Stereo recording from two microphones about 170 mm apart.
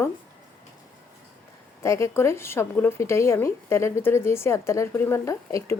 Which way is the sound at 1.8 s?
15° left (ahead or behind).